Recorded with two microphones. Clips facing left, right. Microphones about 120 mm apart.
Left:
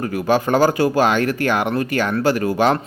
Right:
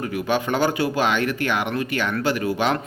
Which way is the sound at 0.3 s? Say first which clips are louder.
Left 6 dB; 40° left (ahead or behind).